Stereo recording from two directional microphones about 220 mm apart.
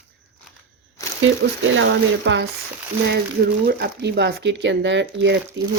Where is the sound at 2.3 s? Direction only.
55° right (ahead or behind).